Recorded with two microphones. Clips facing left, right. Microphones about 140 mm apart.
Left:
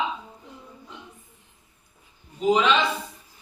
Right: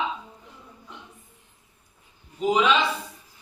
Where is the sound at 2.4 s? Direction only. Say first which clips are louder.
Left 1 dB; 10° right (ahead or behind).